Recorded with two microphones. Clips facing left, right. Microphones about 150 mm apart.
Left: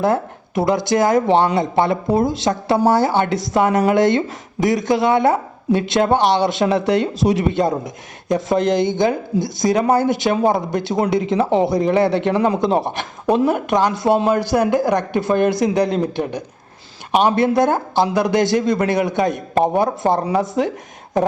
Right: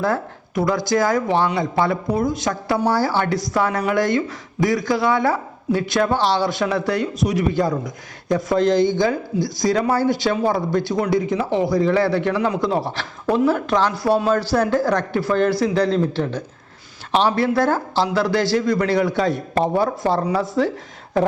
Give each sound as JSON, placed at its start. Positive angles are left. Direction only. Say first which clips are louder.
{"t": 0.0, "sound": "speech", "louder": "left 4 dB", "side_deg": 25}